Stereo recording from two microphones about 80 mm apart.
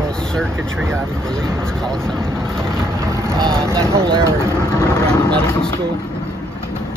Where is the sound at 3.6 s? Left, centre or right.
Right.